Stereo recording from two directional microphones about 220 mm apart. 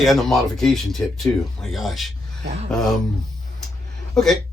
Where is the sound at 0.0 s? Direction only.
Centre (ahead or behind).